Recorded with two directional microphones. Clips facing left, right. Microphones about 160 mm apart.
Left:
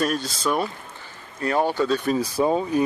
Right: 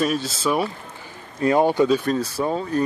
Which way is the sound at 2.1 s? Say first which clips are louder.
Left 2 dB; 15° left (ahead or behind).